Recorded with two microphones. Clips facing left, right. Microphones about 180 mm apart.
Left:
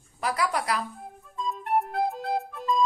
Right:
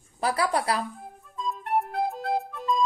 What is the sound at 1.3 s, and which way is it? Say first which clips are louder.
Music: left 1 dB; centre (ahead or behind).